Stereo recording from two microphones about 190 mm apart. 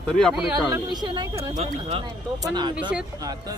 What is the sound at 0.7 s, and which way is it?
Speech, 25° right (ahead or behind).